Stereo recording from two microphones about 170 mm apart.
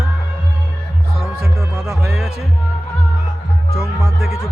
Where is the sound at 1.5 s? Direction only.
15° right (ahead or behind).